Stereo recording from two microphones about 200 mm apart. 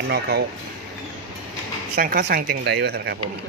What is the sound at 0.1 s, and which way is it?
Speech, 55° right (ahead or behind).